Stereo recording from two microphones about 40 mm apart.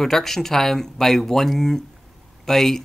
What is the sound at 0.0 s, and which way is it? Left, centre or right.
Speech, centre.